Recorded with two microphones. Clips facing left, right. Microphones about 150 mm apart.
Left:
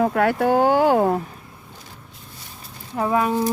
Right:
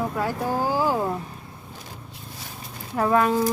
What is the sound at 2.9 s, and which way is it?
Speech, 10° left (ahead or behind).